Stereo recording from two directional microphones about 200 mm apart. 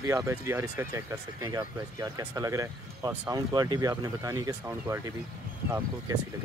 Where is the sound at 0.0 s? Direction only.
15° right (ahead or behind).